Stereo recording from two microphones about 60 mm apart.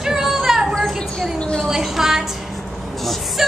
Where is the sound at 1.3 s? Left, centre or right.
Centre.